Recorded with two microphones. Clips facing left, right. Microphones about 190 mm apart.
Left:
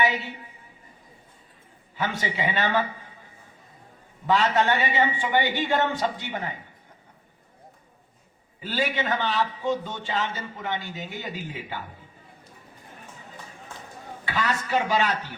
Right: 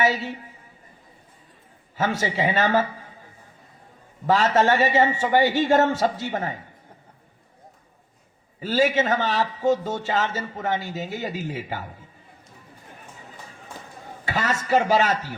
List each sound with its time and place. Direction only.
0.0 s a woman's voice: 40° right (ahead or behind)
2.0 s a man's voice: 40° right (ahead or behind)
4.3 s a man's voice: 40° right (ahead or behind)
8.6 s a man's voice: 40° right (ahead or behind)
14.3 s a man's voice: 40° right (ahead or behind)